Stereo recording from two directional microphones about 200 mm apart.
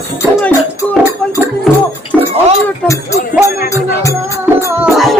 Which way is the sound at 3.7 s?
15° left (ahead or behind).